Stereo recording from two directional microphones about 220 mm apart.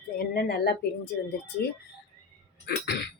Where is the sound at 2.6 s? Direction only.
50° left (ahead or behind).